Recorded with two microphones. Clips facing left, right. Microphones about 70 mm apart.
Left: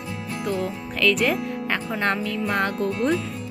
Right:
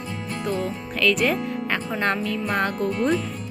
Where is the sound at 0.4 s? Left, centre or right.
Centre.